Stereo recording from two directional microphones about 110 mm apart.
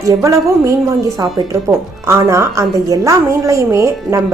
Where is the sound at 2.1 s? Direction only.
25° right (ahead or behind).